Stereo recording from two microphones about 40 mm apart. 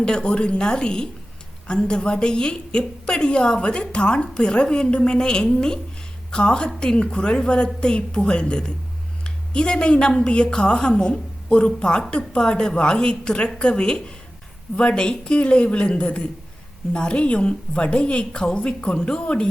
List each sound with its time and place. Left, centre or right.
0.0 s a woman's voice: left